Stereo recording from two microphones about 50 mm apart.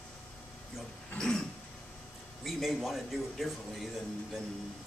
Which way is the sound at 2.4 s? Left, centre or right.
Centre.